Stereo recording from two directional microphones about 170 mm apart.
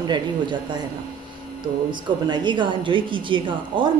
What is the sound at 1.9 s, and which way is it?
Speech, 25° right (ahead or behind).